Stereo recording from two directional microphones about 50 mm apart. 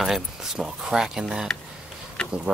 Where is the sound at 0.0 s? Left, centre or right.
Centre.